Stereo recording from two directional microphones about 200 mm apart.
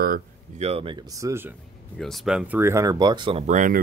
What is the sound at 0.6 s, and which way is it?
Speech, 30° right (ahead or behind).